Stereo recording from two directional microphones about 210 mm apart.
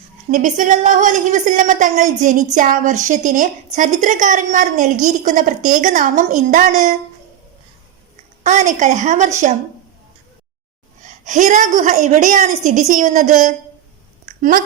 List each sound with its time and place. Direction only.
0.3 s a woman's voice: 35° right (ahead or behind)
8.4 s a woman's voice: 35° right (ahead or behind)
11.0 s a woman's voice: 35° right (ahead or behind)